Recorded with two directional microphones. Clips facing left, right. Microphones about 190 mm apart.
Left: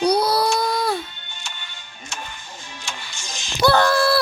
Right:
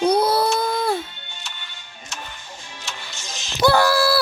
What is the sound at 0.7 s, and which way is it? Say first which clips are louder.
Music: right 1 dB; 25° right (ahead or behind).